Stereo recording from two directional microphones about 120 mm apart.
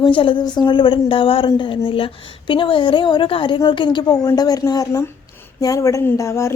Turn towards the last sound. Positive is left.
turn(degrees=25)  # may be behind; listen again after turning